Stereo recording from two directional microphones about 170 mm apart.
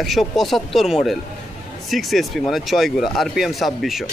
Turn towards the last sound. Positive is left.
turn(degrees=0)  # may be behind; listen again after turning